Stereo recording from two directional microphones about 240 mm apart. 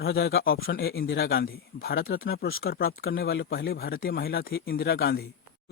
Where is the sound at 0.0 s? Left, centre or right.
Left.